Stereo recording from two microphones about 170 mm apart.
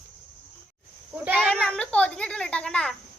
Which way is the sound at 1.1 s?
10° right (ahead or behind).